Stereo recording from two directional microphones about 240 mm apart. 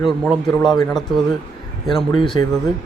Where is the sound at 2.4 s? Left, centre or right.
Centre.